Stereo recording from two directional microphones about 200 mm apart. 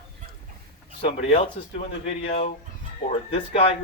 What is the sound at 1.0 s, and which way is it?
A man's voice, 30° left (ahead or behind).